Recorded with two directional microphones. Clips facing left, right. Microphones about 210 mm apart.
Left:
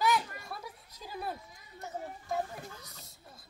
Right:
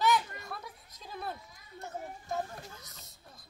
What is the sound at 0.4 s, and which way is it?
Children playing, 10° left (ahead or behind).